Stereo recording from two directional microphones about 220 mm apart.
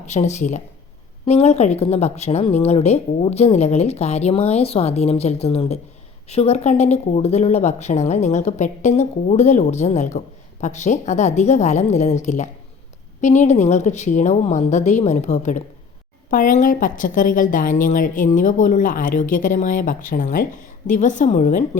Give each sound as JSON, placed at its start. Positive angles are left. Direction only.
{"t": 0.1, "sound": "a woman's voice", "side_deg": 30}